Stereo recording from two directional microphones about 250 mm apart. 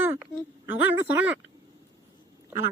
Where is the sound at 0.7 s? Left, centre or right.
Centre.